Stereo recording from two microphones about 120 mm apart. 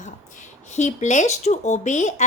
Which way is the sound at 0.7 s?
80° left.